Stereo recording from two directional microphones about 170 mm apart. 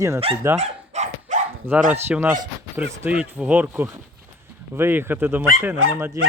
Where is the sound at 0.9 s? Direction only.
40° right (ahead or behind).